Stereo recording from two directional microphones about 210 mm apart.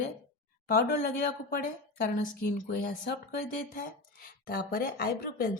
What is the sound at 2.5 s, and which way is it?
A woman's voice, 40° left (ahead or behind).